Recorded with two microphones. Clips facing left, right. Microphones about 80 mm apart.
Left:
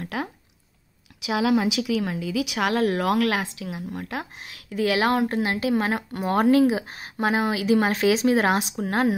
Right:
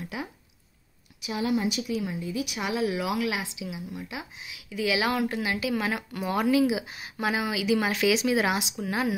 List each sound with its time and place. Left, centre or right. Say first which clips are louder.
0.0 s speech: left 5 dB; left
1.2 s a woman's voice: left 5 dB; left